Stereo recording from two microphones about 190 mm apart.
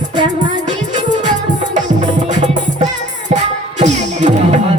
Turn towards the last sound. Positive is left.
turn(degrees=-40)  # may be behind; listen again after turning